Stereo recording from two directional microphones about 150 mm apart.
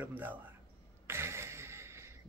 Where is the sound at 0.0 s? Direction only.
10° right (ahead or behind).